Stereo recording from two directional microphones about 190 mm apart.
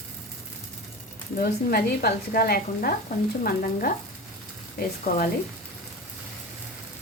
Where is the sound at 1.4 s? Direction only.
55° left (ahead or behind).